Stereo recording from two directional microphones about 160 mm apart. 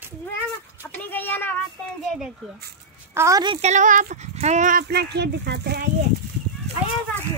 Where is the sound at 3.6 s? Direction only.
45° right (ahead or behind); by 5.9 s 90° right.